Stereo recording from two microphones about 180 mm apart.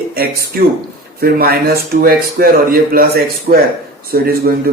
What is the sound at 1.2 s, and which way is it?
Speech, 60° right (ahead or behind).